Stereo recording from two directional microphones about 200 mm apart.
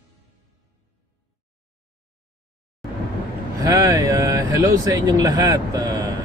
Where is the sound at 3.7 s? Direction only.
15° right (ahead or behind).